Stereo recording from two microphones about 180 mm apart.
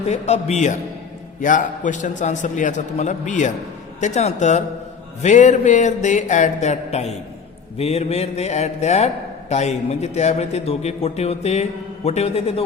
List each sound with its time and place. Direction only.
0.1 s a man's voice: 40° left (ahead or behind)